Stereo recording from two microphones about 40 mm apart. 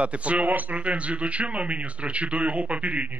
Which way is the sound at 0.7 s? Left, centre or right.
Right.